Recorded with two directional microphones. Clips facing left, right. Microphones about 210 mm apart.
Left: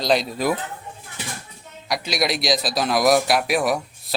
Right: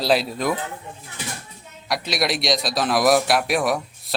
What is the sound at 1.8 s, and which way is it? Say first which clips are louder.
A man's voice: even; centre (ahead or behind).